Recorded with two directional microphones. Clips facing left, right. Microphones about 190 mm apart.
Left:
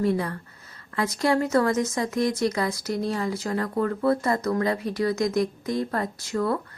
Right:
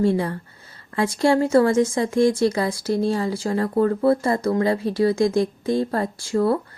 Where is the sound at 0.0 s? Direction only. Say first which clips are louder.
Right 4 dB; 30° right (ahead or behind).